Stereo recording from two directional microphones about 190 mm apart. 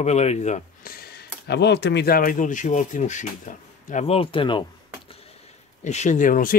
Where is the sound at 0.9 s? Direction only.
55° left (ahead or behind); by 4.6 s 25° left (ahead or behind).